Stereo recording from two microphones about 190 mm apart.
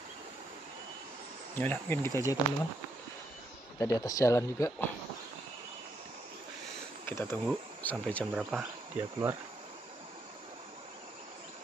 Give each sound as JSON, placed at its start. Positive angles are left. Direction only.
{"t": 1.6, "sound": "speech", "side_deg": 10}
{"t": 3.8, "sound": "speech", "side_deg": 15}
{"t": 7.1, "sound": "insect", "side_deg": 15}